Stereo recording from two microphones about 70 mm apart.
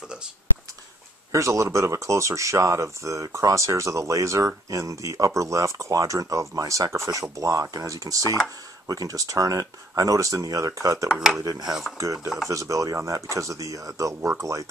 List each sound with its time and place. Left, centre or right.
1.3 s speech: right
11.1 s speech: centre
11.4 s cutlery: right
12.0 s speech: right